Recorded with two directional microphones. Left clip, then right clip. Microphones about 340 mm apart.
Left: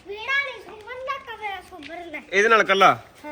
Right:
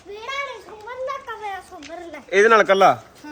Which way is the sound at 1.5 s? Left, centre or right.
Centre.